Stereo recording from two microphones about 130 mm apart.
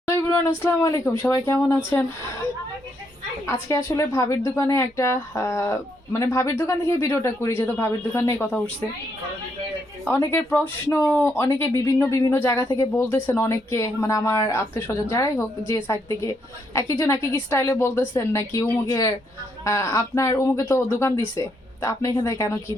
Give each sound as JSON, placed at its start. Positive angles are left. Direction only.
{"t": 0.3, "sound": "speech", "side_deg": 20}
{"t": 3.4, "sound": "speech", "side_deg": 25}
{"t": 10.1, "sound": "speech", "side_deg": 20}